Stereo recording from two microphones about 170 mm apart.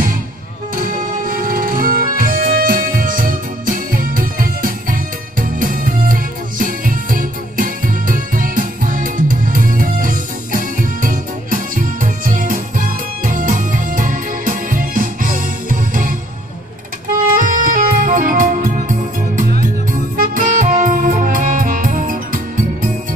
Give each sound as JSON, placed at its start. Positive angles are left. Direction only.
{"t": 0.7, "sound": "music", "side_deg": -55}
{"t": 17.4, "sound": "music", "side_deg": -50}